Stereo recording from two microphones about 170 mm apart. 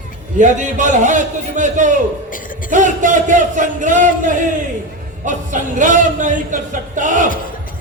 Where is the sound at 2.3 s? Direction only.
55° left (ahead or behind).